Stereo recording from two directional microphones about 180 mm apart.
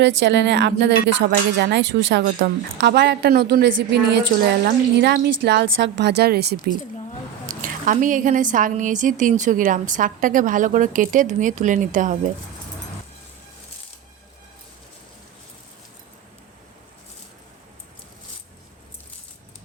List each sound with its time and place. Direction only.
0.0 s speech: 80° right
4.6 s speech: 65° right (ahead or behind)
7.4 s a woman's voice: 45° right (ahead or behind)